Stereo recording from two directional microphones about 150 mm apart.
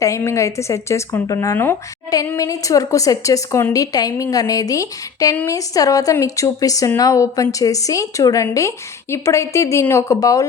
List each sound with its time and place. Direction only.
0.0 s speech: 20° left (ahead or behind)